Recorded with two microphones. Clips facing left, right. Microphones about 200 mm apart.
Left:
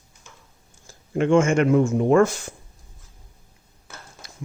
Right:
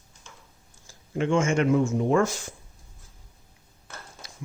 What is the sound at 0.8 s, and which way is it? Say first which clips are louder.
Speech: left 5 dB; 55° left (ahead or behind).